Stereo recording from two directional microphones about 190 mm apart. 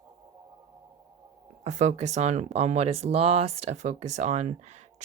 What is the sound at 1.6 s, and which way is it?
Speech, 40° right (ahead or behind).